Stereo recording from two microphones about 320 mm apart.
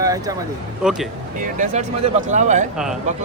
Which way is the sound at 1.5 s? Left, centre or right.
Right.